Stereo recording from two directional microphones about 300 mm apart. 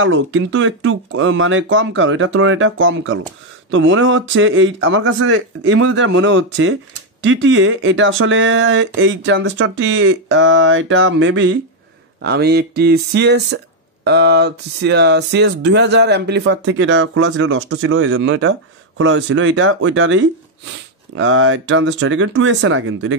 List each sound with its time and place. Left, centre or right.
0.0 s speech: right